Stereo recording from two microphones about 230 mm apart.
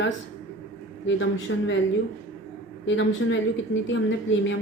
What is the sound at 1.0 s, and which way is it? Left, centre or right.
Speech, left.